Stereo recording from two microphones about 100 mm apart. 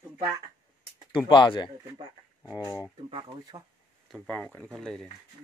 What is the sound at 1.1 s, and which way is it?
Speech, 55° left (ahead or behind).